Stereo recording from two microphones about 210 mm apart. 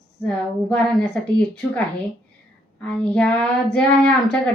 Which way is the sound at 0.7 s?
5° left (ahead or behind).